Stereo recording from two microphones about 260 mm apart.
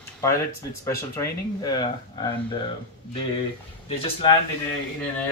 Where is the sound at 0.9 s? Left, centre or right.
Centre.